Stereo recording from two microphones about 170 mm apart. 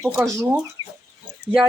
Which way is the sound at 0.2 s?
10° right (ahead or behind).